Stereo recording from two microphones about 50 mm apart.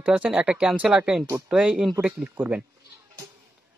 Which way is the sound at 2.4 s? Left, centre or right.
Right.